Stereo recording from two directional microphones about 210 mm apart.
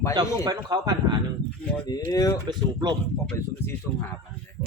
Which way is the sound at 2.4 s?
20° right (ahead or behind).